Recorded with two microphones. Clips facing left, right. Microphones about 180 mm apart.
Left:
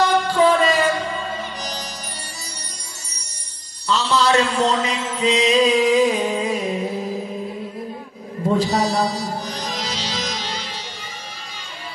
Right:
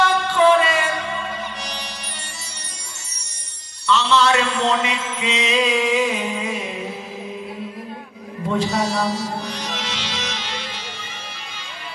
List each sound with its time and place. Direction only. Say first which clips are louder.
0.3 s music: right 3 dB; 40° left (ahead or behind)
3.8 s mantra: right 1 dB; 35° left (ahead or behind)
8.5 s music: even; 35° left (ahead or behind)